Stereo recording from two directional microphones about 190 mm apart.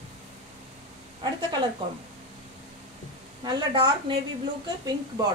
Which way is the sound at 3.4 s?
25° right (ahead or behind).